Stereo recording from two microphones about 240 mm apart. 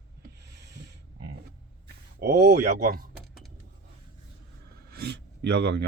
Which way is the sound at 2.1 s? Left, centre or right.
Right.